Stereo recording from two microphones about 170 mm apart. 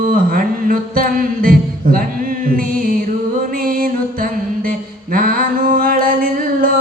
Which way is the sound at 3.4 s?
55° right (ahead or behind).